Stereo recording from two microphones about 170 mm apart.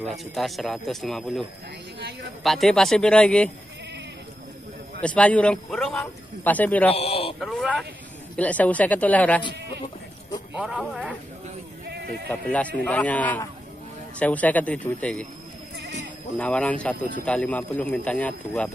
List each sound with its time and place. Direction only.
0.1 s speech: centre (ahead or behind)
2.4 s speech: centre (ahead or behind)
5.0 s a man's voice: 5° left (ahead or behind)
6.9 s a sound: 35° left (ahead or behind)
7.3 s a man's voice: centre (ahead or behind)
10.5 s speech: 5° right (ahead or behind)
11.9 s sheep: 70° right (ahead or behind)
12.3 s a man's voice: 10° left (ahead or behind)
16.3 s a man's voice: 5° left (ahead or behind)